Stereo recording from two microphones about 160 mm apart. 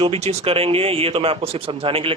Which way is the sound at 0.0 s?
40° right (ahead or behind).